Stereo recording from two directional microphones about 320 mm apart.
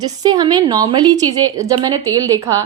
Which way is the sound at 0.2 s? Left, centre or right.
Centre.